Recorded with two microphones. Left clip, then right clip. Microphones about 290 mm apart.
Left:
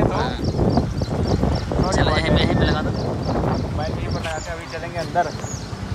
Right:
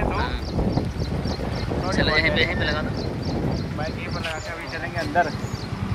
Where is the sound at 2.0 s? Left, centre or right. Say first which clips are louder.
Even; centre.